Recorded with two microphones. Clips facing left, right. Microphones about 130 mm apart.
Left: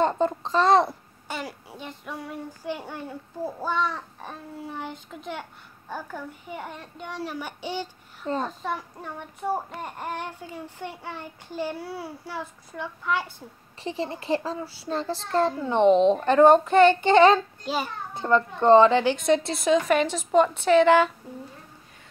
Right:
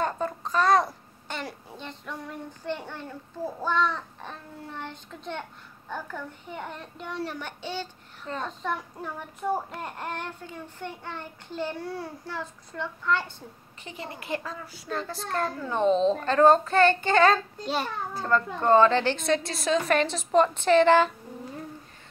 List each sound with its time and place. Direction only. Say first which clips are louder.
0.0 s a child's voice: left 6 dB; 25° left (ahead or behind)
1.2 s child singing: left 2 dB; 5° left (ahead or behind)
8.5 s child singing: left 1 dB; 5° left (ahead or behind)
13.8 s a child's voice: left 8 dB; 30° left (ahead or behind)
19.9 s a woman's voice: left 2 dB; 10° left (ahead or behind)